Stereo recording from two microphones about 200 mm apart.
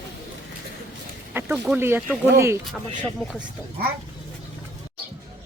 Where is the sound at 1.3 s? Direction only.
10° right (ahead or behind).